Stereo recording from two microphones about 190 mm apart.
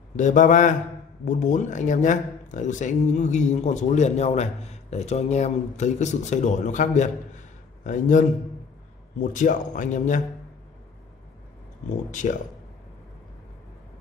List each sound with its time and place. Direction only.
0.1 s speech: 40° left (ahead or behind)
12.1 s speech: 40° left (ahead or behind)